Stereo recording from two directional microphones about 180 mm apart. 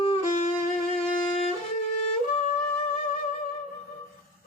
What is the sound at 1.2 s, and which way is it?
Music, 30° left (ahead or behind).